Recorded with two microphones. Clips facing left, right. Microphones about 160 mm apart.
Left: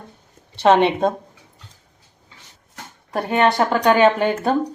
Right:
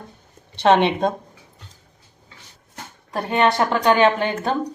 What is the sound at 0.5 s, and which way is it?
Speech, 5° left (ahead or behind).